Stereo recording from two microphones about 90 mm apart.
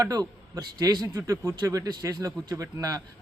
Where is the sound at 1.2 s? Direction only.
30° right (ahead or behind).